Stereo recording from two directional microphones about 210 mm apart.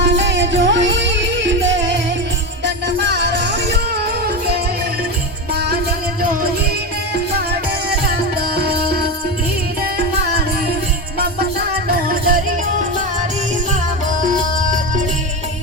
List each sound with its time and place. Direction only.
0.2 s music: 60° right (ahead or behind)
5.5 s music: 50° right (ahead or behind)
8.4 s music: 50° right (ahead or behind)
11.9 s music: 45° right (ahead or behind)